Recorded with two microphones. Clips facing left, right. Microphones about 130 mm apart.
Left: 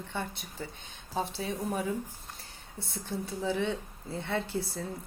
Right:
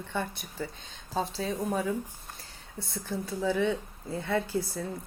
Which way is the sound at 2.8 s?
25° left (ahead or behind).